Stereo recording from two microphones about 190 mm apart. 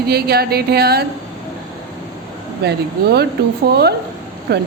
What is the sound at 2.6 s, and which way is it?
Speech, 60° right (ahead or behind).